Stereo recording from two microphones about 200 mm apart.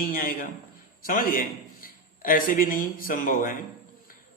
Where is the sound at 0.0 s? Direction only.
45° left (ahead or behind).